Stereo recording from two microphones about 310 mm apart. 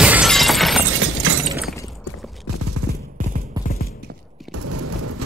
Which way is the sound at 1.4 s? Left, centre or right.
Centre.